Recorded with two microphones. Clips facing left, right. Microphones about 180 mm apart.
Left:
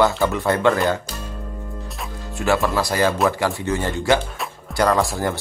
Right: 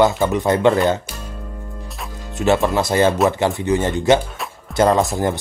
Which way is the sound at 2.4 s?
20° right (ahead or behind).